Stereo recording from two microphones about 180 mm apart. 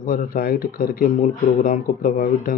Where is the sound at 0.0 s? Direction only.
50° left (ahead or behind).